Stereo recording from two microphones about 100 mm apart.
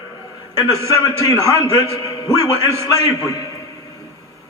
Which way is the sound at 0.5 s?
35° left (ahead or behind).